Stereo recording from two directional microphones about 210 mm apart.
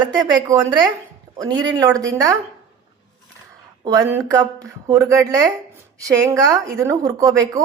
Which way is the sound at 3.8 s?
15° right (ahead or behind).